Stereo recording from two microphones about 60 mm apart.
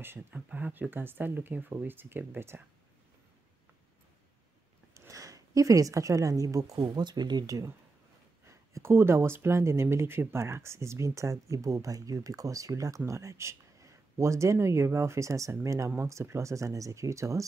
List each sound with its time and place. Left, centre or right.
0.3 s speech: right
4.9 s a woman's voice: right
8.5 s speech: right